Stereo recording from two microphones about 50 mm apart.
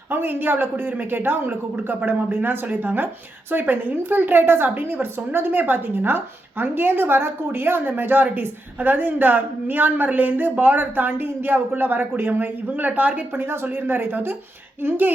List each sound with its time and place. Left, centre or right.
0.1 s speech: right